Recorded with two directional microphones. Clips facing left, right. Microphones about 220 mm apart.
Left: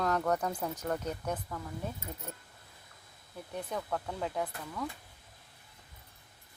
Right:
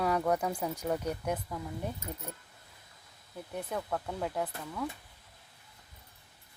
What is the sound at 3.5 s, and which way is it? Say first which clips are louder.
Speech: right 1 dB; 5° right (ahead or behind).